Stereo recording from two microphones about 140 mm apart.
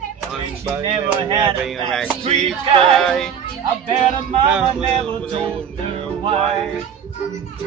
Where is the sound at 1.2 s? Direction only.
35° right (ahead or behind).